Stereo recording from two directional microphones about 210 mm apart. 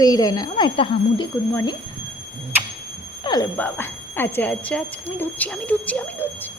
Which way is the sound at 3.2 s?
20° left (ahead or behind).